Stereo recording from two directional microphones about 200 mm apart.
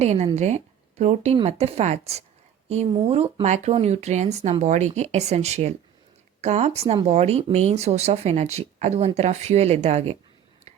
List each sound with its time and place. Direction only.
0.0 s speech: 35° right (ahead or behind)